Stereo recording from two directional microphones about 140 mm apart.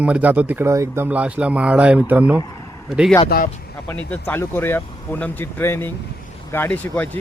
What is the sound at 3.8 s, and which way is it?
Speech, 15° left (ahead or behind).